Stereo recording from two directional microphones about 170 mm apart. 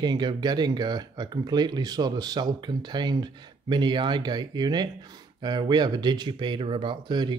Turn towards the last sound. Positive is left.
turn(degrees=-25)  # may be behind; listen again after turning